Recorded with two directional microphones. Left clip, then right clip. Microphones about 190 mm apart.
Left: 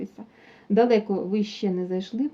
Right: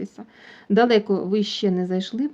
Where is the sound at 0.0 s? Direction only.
35° right (ahead or behind).